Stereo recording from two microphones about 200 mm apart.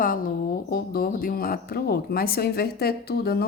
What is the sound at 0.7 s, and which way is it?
Speech, 50° left (ahead or behind).